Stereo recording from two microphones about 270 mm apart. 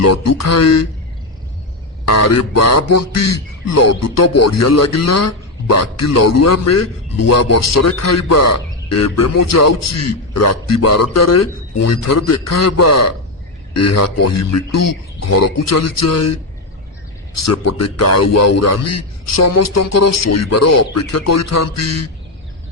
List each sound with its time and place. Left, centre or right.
0.0 s speech: left
2.0 s speech: left